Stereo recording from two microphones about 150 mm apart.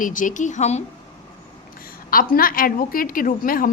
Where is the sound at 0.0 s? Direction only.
60° left (ahead or behind).